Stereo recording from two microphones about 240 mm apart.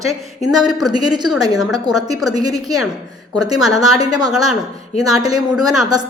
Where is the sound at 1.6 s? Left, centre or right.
Centre.